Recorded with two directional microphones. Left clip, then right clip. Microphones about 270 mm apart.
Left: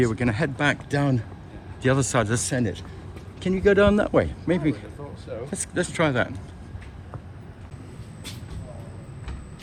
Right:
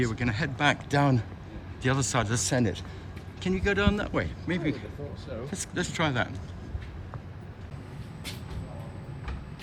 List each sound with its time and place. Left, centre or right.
0.1 s speech: centre
1.8 s speech: centre
3.4 s a man's voice: centre